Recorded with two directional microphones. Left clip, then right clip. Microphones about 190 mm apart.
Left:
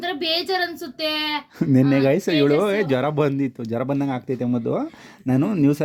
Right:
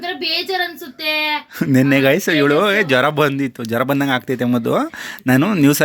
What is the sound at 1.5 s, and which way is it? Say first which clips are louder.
Speech: right 3 dB; 10° left (ahead or behind).